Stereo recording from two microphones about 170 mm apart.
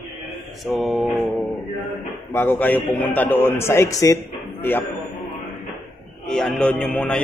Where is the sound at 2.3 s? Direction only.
10° left (ahead or behind).